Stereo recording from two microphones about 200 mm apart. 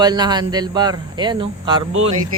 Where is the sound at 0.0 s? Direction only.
20° right (ahead or behind).